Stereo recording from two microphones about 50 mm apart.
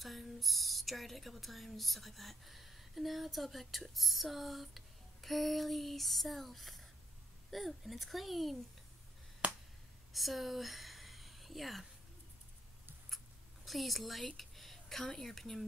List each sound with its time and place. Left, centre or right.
0.0 s speech: centre
9.4 s finger snapping: right
10.1 s speech: centre
13.7 s speech: centre